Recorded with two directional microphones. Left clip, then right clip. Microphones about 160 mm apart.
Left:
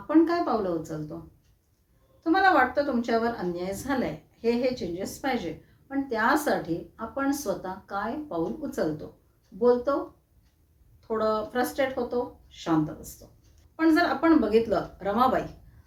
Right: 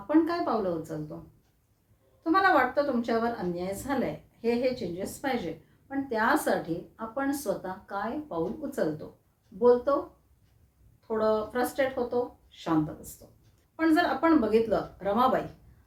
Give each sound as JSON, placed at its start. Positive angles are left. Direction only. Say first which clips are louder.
{"t": 0.1, "sound": "a woman's voice", "louder": "left 3 dB", "side_deg": -15}
{"t": 2.2, "sound": "a woman's voice", "louder": "left 2 dB", "side_deg": -15}
{"t": 11.1, "sound": "a woman's voice", "louder": "even", "side_deg": -15}